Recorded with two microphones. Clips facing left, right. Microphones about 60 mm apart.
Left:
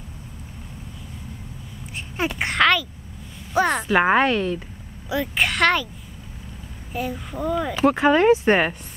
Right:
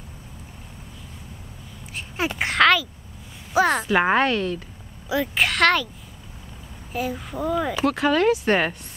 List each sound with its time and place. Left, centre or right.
2.0 s a child's voice: centre
6.9 s a child's voice: centre
7.8 s speech: left